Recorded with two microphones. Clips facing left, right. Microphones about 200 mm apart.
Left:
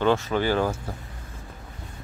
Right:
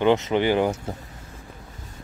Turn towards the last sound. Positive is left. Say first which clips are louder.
# right 3 dB
turn(degrees=-20)  # may be behind; listen again after turning